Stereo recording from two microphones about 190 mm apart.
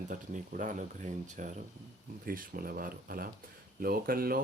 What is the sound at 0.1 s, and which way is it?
Speech, 40° right (ahead or behind).